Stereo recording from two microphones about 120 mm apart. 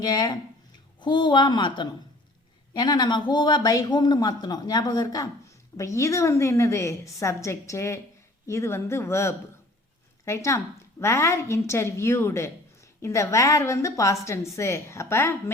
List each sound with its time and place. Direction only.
0.0 s a woman's voice: 35° left (ahead or behind)